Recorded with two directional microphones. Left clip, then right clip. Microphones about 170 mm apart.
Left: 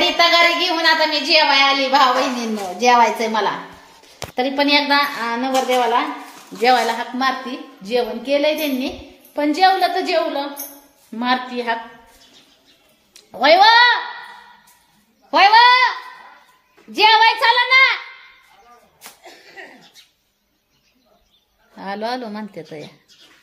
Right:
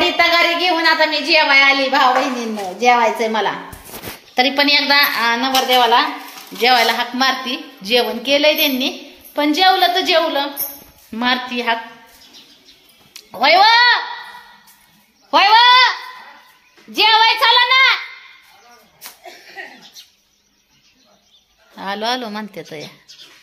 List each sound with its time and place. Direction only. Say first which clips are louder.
0.0 s a woman's voice: even; centre (ahead or behind)
13.1 s speech: even; 5° right (ahead or behind)
15.3 s a woman's voice: right 1 dB; centre (ahead or behind)
16.9 s a woman's voice: even; centre (ahead or behind)
19.6 s cough: right 5 dB; 75° left (ahead or behind)
21.7 s a woman's voice: right 4 dB; 5° right (ahead or behind)